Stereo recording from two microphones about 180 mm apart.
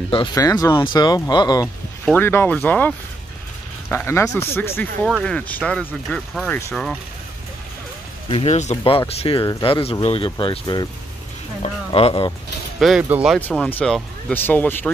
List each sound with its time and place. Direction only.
0.1 s speech: 25° left (ahead or behind)
2.1 s speech: 10° left (ahead or behind)
3.9 s speech: 15° left (ahead or behind)
8.3 s speech: 35° left (ahead or behind)
12.7 s speech: centre (ahead or behind)
13.4 s speech: 10° left (ahead or behind)